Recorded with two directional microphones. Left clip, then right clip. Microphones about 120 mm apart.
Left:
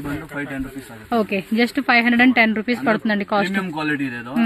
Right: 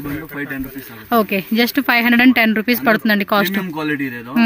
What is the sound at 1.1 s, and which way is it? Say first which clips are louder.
Speech: right 4 dB; 35° right (ahead or behind).